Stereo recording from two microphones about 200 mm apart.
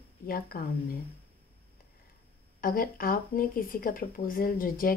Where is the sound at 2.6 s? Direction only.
45° left (ahead or behind).